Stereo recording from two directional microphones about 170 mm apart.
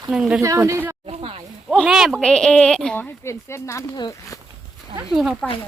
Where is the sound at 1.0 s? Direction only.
35° right (ahead or behind).